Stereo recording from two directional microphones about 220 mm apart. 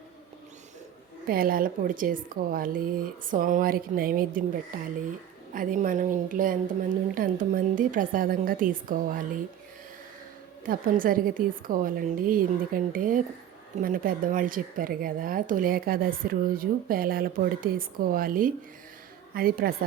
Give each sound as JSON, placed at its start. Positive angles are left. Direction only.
{"t": 1.3, "sound": "speech", "side_deg": -40}
{"t": 10.7, "sound": "a woman's voice", "side_deg": -40}